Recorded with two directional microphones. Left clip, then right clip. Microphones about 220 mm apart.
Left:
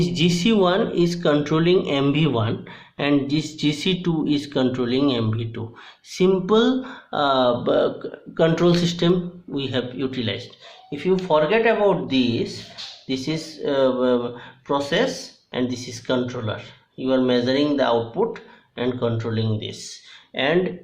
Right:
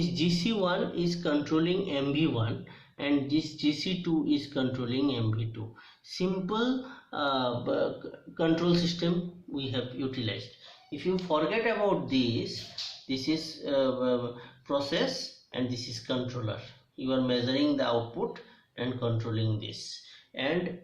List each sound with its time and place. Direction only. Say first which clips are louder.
0.1 s a man's voice: left 10 dB; 50° left (ahead or behind)